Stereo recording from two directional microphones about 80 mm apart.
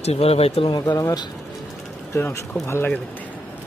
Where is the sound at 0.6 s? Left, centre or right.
Left.